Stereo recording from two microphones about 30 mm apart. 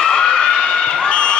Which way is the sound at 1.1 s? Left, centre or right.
Left.